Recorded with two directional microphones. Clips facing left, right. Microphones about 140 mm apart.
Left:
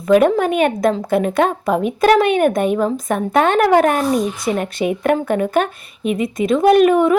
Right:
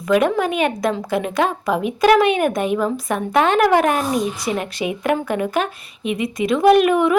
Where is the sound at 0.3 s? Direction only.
50° left (ahead or behind).